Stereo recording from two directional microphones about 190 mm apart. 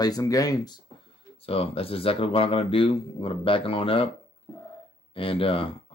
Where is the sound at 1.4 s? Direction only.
30° left (ahead or behind).